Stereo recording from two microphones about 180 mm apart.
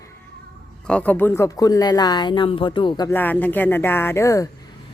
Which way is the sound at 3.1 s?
10° left (ahead or behind).